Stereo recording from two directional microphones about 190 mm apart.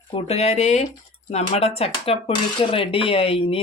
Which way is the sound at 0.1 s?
35° left (ahead or behind).